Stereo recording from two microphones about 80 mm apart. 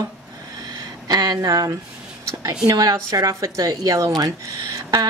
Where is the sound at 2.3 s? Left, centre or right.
Right.